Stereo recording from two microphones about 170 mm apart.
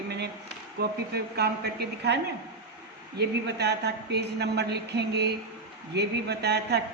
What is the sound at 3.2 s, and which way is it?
Speech, 75° right (ahead or behind).